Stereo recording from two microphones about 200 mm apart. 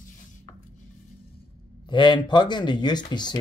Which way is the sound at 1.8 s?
25° left (ahead or behind).